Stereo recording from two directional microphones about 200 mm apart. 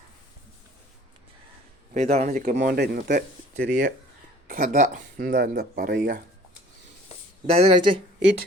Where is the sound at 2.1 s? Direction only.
40° right (ahead or behind); by 3.6 s 55° right (ahead or behind).